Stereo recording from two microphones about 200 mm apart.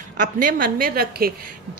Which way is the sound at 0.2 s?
40° right (ahead or behind).